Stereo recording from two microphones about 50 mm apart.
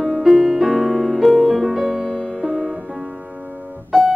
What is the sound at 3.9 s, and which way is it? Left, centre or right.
Music, centre.